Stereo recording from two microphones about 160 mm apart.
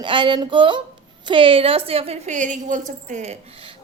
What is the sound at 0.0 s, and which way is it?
A woman's voice, 30° right (ahead or behind).